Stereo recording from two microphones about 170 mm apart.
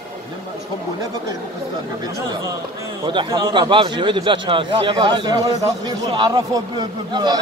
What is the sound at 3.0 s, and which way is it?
A man's voice, 30° right (ahead or behind).